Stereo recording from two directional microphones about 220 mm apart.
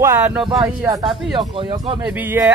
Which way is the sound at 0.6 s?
15° right (ahead or behind).